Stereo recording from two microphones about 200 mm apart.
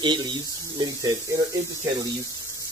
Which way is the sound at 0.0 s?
20° right (ahead or behind).